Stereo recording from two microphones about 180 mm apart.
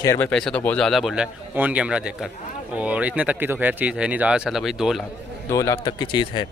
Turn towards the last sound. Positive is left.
turn(degrees=25)  # may be behind; listen again after turning